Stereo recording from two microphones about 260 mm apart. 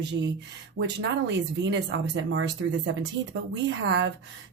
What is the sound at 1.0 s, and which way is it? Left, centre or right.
A woman's voice, right.